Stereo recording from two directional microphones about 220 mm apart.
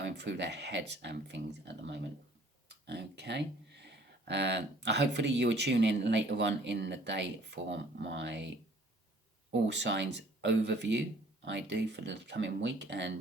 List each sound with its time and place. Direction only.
0.0 s speech: 50° right (ahead or behind)
9.5 s speech: 50° right (ahead or behind)